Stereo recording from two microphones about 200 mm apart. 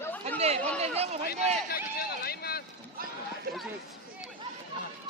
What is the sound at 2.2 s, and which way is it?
Vehicle, 50° left (ahead or behind).